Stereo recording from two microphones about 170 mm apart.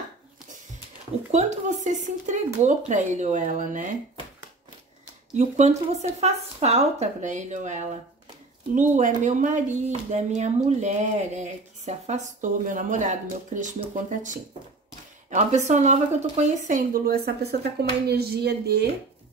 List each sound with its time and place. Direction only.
1.3 s speech: 40° right (ahead or behind)
5.3 s speech: 40° right (ahead or behind); by 17.6 s 70° right (ahead or behind)
18.0 s a sound: 70° right (ahead or behind)